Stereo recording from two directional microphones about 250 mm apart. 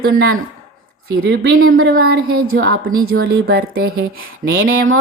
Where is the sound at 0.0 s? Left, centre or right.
Right.